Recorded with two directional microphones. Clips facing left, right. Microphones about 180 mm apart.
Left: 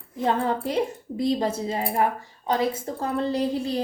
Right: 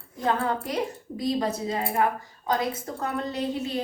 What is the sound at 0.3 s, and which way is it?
A woman's voice, 25° left (ahead or behind).